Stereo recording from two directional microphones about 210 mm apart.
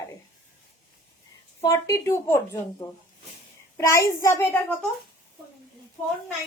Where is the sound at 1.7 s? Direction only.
15° left (ahead or behind).